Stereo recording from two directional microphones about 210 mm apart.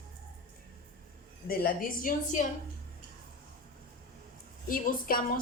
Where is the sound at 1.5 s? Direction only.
45° left (ahead or behind).